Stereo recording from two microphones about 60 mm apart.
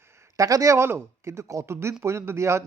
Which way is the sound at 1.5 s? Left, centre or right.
Right.